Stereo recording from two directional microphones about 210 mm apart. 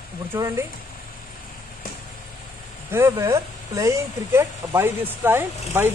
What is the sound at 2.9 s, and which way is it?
Speech, 15° right (ahead or behind).